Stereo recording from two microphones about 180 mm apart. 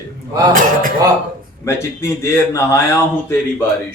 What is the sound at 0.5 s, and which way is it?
Speech, 50° right (ahead or behind).